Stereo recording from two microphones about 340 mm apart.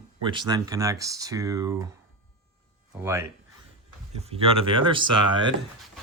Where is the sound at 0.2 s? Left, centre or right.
Centre.